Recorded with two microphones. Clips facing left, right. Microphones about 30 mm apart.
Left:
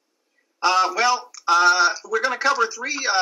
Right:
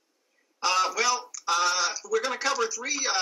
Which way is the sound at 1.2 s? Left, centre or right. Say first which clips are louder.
Left 5 dB; left.